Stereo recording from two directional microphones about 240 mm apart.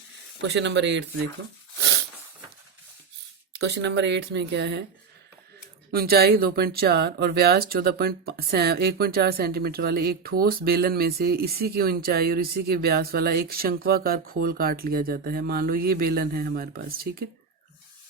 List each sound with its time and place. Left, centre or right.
0.4 s speech: right
3.5 s speech: right
5.9 s speech: right